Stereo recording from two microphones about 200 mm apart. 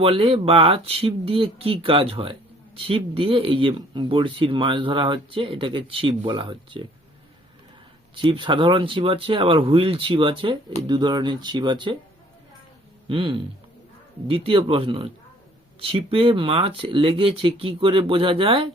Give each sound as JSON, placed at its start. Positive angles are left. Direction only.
{"t": 0.0, "sound": "speech", "side_deg": -30}
{"t": 8.1, "sound": "speech", "side_deg": -25}
{"t": 13.1, "sound": "speech", "side_deg": -25}